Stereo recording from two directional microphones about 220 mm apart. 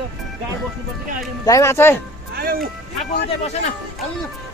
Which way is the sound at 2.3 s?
45° right (ahead or behind).